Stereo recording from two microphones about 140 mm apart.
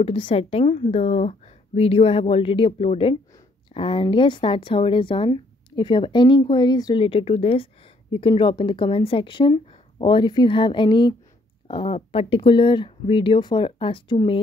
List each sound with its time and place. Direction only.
0.0 s speech: 40° left (ahead or behind)
7.1 s speech: 40° left (ahead or behind)